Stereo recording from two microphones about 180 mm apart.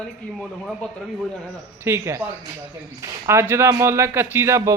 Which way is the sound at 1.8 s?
15° right (ahead or behind).